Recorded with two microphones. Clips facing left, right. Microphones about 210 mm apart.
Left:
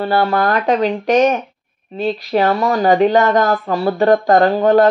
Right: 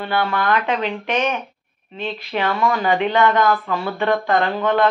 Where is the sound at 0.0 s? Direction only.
40° left (ahead or behind).